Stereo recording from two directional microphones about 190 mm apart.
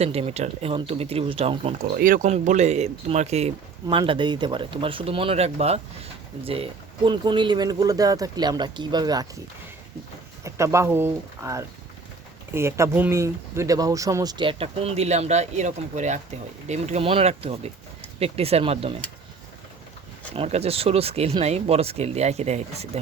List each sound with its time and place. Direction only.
0.0 s speech: 30° right (ahead or behind)
1.8 s speech: 45° right (ahead or behind); by 9.2 s 20° right (ahead or behind)
10.4 s speech: 15° right (ahead or behind); by 18.9 s 30° right (ahead or behind)
20.3 s speech: 30° right (ahead or behind)